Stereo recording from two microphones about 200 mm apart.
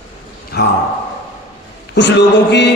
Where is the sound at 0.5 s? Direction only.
55° left (ahead or behind).